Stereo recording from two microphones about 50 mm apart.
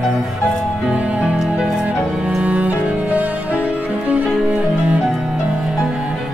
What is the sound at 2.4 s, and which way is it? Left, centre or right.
Cello, right.